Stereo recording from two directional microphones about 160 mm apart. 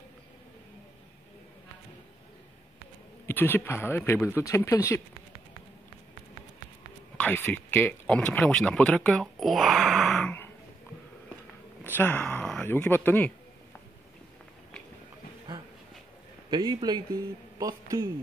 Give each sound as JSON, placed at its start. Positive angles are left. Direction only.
{"t": 3.3, "sound": "speech", "side_deg": 15}
{"t": 7.2, "sound": "speech", "side_deg": 10}
{"t": 11.9, "sound": "speech", "side_deg": 10}
{"t": 15.5, "sound": "a sound", "side_deg": -30}
{"t": 16.4, "sound": "speech", "side_deg": -30}